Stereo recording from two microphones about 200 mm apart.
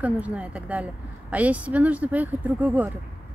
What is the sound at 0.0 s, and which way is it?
Speech, 5° right (ahead or behind).